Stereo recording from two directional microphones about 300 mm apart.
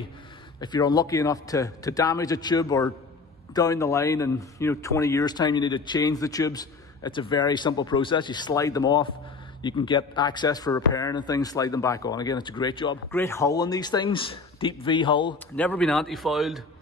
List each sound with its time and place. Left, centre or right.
0.6 s speech: centre
15.5 s speech: centre